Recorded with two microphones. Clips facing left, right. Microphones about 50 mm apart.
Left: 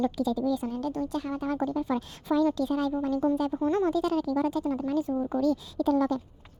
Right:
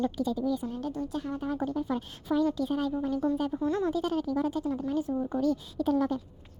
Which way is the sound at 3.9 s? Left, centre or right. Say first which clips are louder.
Left 3 dB; left.